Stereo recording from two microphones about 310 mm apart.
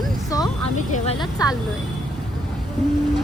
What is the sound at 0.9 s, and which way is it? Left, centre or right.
Speech, centre.